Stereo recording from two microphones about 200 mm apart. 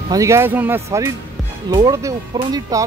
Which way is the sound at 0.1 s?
15° right (ahead or behind).